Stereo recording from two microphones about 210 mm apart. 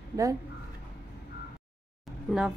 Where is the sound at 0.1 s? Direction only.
15° right (ahead or behind).